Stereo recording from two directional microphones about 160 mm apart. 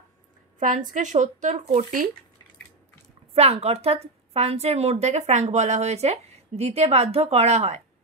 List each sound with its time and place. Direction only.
0.6 s speech: 50° right (ahead or behind)
3.3 s a woman's voice: 40° right (ahead or behind)